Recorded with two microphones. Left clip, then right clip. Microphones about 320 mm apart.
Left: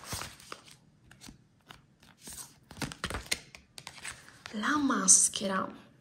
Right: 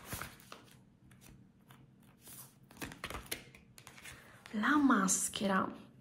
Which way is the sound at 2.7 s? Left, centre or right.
Left.